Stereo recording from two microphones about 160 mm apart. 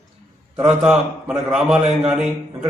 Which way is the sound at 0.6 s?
5° right (ahead or behind).